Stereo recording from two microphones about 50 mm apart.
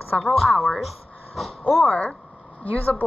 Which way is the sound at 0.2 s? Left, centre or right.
Centre.